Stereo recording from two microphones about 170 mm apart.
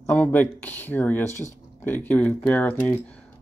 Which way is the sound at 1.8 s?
10° left (ahead or behind).